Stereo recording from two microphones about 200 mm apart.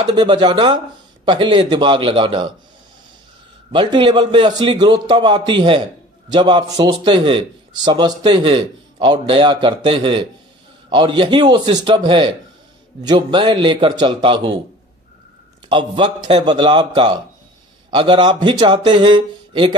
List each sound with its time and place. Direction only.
0.0 s a man's voice: 20° right (ahead or behind)
3.7 s a man's voice: 25° right (ahead or behind)
15.7 s a man's voice: 25° right (ahead or behind)